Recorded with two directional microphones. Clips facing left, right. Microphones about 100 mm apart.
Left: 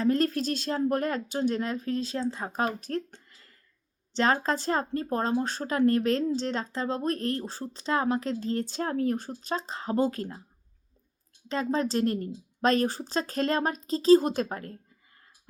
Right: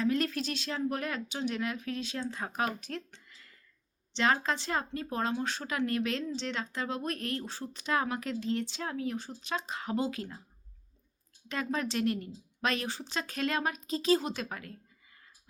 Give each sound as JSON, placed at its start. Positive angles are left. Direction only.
{"t": 0.0, "sound": "speech", "side_deg": 40}
{"t": 11.4, "sound": "speech", "side_deg": 30}